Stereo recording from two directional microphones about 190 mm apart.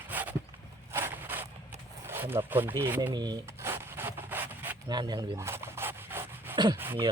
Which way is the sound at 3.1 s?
20° right (ahead or behind).